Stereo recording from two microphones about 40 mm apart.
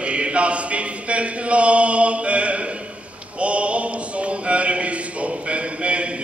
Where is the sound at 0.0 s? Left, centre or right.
Right.